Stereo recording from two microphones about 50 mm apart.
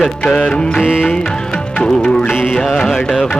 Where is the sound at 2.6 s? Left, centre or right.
Centre.